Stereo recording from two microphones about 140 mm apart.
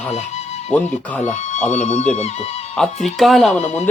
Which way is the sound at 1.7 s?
50° left (ahead or behind).